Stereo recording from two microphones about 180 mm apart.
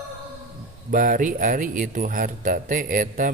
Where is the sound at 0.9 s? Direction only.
50° right (ahead or behind).